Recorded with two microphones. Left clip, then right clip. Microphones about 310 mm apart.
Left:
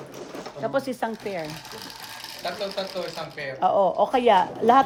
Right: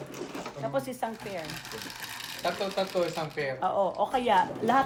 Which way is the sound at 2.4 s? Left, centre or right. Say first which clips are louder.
Even; centre.